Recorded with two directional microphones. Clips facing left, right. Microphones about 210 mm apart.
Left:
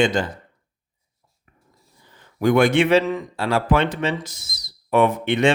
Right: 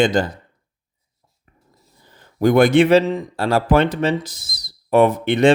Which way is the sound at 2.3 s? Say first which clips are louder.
Right 3 dB; 40° right (ahead or behind).